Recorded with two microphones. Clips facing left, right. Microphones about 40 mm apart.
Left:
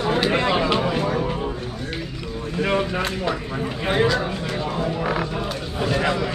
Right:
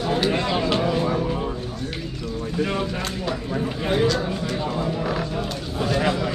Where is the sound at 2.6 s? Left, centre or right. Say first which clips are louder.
Left 4 dB; left.